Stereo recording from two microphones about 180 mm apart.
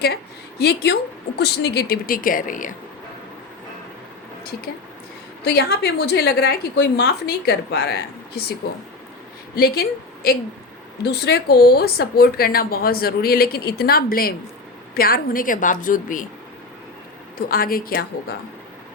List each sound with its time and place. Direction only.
0.6 s speech: 65° left (ahead or behind); by 2.7 s 50° left (ahead or behind)
5.4 s speech: 65° left (ahead or behind)
9.6 s speech: 55° left (ahead or behind)
11.0 s a woman's voice: 65° left (ahead or behind); by 16.2 s 50° left (ahead or behind)
17.3 s a woman's voice: 55° left (ahead or behind)